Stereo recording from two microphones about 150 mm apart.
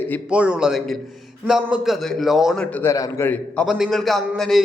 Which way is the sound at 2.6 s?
10° left (ahead or behind).